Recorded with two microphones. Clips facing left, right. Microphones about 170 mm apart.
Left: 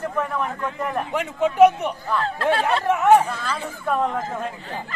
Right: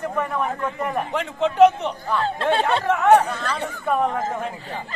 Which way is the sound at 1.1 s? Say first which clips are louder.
Even; 10° left (ahead or behind).